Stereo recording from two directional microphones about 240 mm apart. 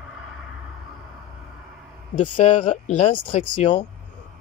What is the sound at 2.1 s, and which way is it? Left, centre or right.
Speech, left.